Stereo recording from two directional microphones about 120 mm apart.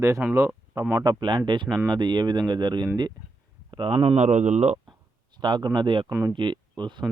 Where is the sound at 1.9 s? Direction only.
40° right (ahead or behind).